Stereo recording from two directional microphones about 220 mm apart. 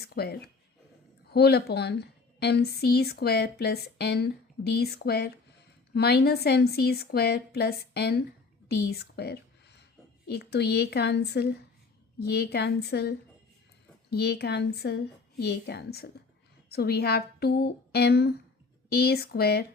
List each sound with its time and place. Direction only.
0.0 s a woman's voice: 45° left (ahead or behind)
8.7 s whispering: 45° left (ahead or behind)
10.2 s a woman's voice: 50° left (ahead or behind)